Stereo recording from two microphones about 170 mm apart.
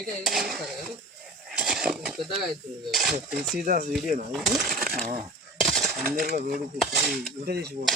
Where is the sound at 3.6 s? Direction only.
55° right (ahead or behind).